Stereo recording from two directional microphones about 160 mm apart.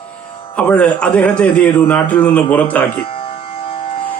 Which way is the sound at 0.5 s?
10° left (ahead or behind).